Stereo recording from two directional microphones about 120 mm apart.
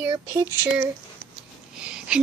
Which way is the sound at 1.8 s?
10° right (ahead or behind).